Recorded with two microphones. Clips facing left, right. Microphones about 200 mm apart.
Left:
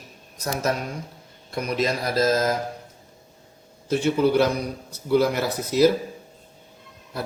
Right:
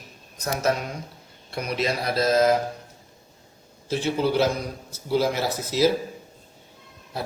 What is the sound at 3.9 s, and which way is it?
Speech, 55° left (ahead or behind).